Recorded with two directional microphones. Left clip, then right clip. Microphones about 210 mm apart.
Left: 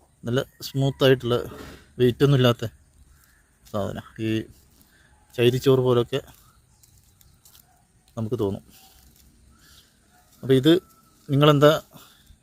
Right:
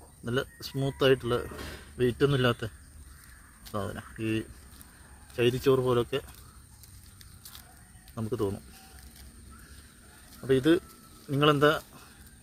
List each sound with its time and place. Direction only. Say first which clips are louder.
0.3 s speech: left 5 dB; 45° left (ahead or behind)
8.1 s speech: left 5 dB; 45° left (ahead or behind)
10.4 s speech: left 6 dB; 50° left (ahead or behind)